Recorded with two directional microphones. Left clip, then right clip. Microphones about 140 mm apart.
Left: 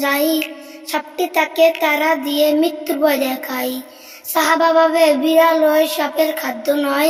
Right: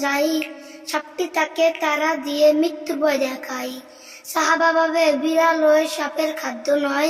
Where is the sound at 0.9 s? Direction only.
30° left (ahead or behind).